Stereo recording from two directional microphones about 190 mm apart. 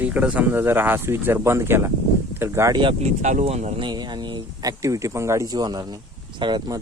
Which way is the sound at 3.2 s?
40° right (ahead or behind).